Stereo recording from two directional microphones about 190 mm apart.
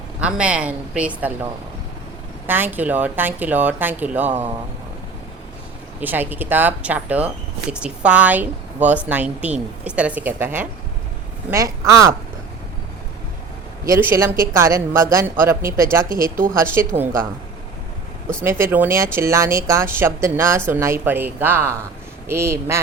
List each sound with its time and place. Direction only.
0.2 s speech: 5° right (ahead or behind)
2.5 s speech: 10° right (ahead or behind)
6.0 s speech: 10° right (ahead or behind)
13.8 s speech: 15° right (ahead or behind)
16.0 s speech: 45° right (ahead or behind)
16.8 s speech: 15° right (ahead or behind)
18.4 s speech: 10° right (ahead or behind)